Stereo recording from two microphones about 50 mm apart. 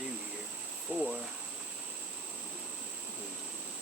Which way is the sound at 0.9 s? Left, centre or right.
Right.